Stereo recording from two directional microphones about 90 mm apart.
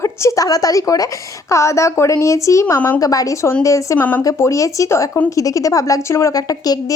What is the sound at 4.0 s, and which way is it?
Speech, 20° left (ahead or behind).